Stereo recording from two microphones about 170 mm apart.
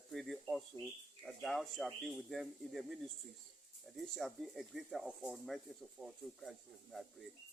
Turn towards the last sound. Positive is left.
turn(degrees=0)  # may be behind; listen again after turning